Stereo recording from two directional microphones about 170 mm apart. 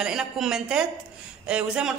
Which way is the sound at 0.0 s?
5° right (ahead or behind).